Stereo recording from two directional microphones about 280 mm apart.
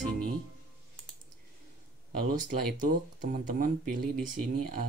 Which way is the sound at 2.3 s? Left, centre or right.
Right.